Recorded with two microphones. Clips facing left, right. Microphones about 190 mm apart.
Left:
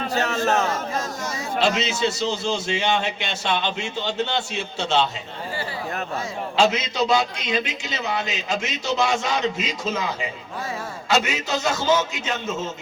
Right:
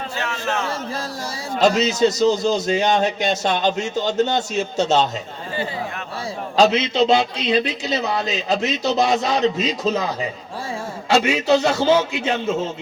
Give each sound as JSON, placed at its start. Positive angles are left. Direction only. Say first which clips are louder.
{"t": 0.1, "sound": "a sound", "louder": "left 5 dB", "side_deg": 40}
{"t": 1.5, "sound": "a man's voice", "louder": "right 6 dB", "side_deg": -40}
{"t": 6.6, "sound": "a man's voice", "louder": "right 5 dB", "side_deg": -30}